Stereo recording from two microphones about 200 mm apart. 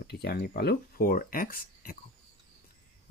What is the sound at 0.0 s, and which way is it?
Speech, 50° left (ahead or behind).